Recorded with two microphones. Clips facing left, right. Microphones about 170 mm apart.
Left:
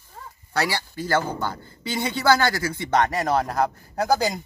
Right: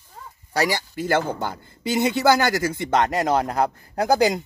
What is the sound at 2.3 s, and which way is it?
Speech, 20° right (ahead or behind).